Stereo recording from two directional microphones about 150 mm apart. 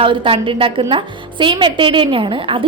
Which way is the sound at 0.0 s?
35° right (ahead or behind).